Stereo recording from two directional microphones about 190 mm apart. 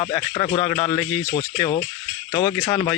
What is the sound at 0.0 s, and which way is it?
Speech, 25° left (ahead or behind).